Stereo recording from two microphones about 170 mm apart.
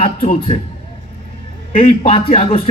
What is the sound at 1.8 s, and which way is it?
Speech, 55° left (ahead or behind).